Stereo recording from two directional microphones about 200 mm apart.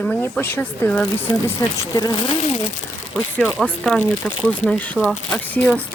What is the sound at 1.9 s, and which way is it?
Speech, 20° left (ahead or behind).